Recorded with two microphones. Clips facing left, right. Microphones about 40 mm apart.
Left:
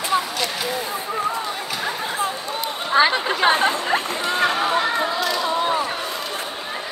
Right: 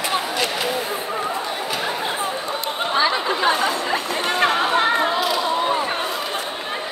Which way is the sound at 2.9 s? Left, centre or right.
Left.